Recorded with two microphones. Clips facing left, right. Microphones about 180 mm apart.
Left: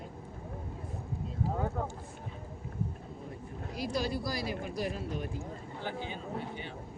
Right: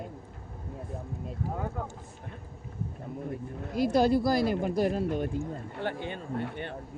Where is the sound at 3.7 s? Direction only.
55° right (ahead or behind).